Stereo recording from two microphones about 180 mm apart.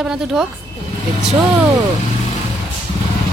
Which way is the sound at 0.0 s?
5° right (ahead or behind).